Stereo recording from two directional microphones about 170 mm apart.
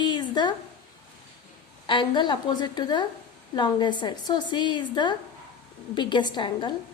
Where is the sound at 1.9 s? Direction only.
30° left (ahead or behind).